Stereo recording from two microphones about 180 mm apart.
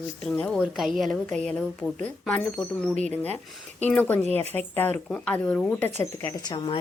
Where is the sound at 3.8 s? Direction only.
10° left (ahead or behind).